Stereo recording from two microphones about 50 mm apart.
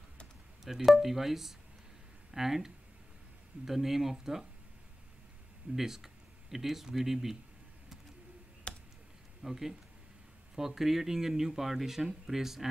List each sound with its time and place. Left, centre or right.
0.7 s speech: centre
5.8 s speech: centre
8.7 s clicking: left
9.4 s speech: centre